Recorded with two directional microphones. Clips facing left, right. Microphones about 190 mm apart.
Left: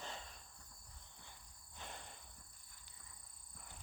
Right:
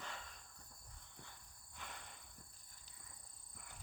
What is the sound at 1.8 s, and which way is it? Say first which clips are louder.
Cricket: left 2 dB; 30° left (ahead or behind).